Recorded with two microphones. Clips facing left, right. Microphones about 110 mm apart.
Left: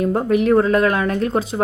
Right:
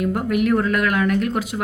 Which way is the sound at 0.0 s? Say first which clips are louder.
Left 3 dB; 30° left (ahead or behind).